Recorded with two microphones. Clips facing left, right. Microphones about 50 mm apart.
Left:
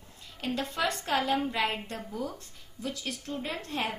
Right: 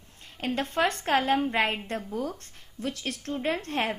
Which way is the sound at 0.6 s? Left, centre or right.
Right.